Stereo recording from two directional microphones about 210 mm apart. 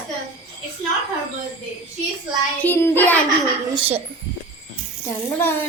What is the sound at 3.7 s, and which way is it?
Speech, 25° right (ahead or behind).